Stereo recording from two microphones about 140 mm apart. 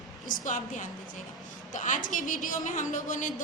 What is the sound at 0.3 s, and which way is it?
A woman's voice, 70° left (ahead or behind).